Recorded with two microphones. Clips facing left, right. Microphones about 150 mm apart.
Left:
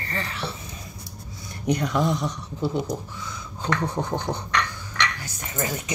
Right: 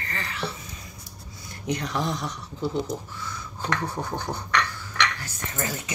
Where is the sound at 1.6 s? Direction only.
20° left (ahead or behind).